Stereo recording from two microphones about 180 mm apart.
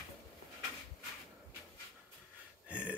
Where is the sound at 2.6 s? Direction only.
5° right (ahead or behind).